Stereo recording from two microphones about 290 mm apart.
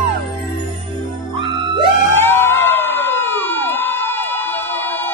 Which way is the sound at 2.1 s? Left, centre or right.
Centre.